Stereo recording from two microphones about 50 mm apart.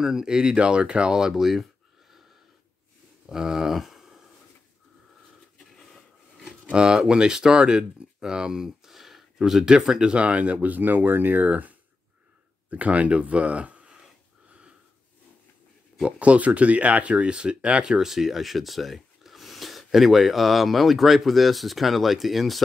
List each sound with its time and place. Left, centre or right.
0.0 s speech: centre
3.3 s speech: centre
6.7 s speech: centre
16.0 s speech: right
17.9 s speech: centre